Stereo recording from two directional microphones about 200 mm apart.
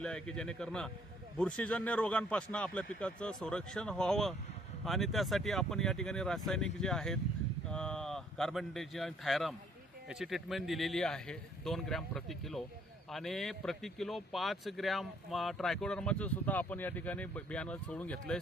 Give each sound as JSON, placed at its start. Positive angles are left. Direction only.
{"t": 0.0, "sound": "speech", "side_deg": 5}